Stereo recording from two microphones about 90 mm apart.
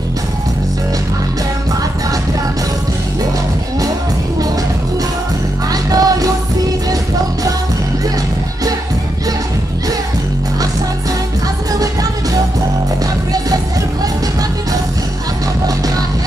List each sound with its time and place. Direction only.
5.7 s music: 45° right (ahead or behind)